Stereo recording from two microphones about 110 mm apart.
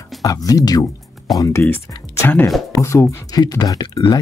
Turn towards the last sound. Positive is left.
turn(degrees=40)  # may be behind; listen again after turning